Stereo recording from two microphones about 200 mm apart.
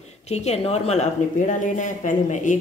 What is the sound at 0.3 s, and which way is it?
Speech, 35° left (ahead or behind).